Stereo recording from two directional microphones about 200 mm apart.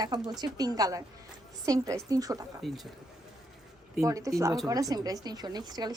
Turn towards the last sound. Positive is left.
turn(degrees=-20)  # may be behind; listen again after turning